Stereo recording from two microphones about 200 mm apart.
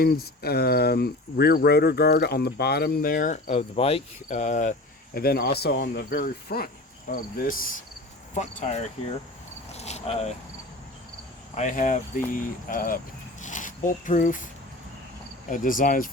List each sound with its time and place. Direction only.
0.0 s speech: 50° left (ahead or behind)
5.1 s speech: 50° left (ahead or behind)
8.4 s speech: 35° left (ahead or behind)
11.5 s speech: 40° left (ahead or behind)
13.4 s zipper: 40° left (ahead or behind)
15.4 s speech: 40° left (ahead or behind)